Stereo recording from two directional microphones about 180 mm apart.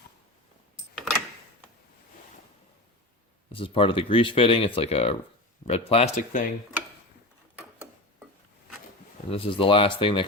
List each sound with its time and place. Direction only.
3.5 s speech: 30° left (ahead or behind); by 6.5 s 45° left (ahead or behind)
9.3 s speech: 30° left (ahead or behind)